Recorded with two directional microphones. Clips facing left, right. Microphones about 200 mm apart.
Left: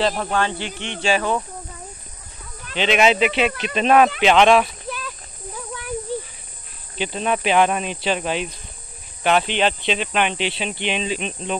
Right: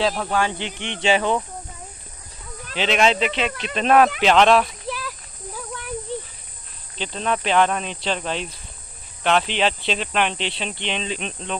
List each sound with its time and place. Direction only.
0.0 s speech: centre (ahead or behind)
0.4 s speech: 15° right (ahead or behind)
2.7 s speech: centre (ahead or behind)
4.9 s a sound: 5° right (ahead or behind)
7.0 s speech: 10° left (ahead or behind)